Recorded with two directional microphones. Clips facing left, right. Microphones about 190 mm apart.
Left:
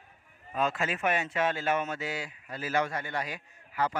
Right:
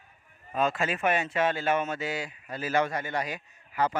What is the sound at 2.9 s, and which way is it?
A man's voice, 15° right (ahead or behind).